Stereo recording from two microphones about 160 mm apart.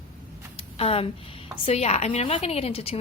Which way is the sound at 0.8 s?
40° left (ahead or behind).